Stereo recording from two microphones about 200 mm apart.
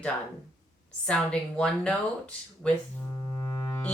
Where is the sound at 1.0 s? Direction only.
5° left (ahead or behind).